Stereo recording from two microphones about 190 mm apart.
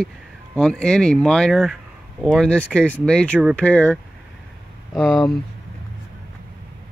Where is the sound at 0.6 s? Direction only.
5° left (ahead or behind).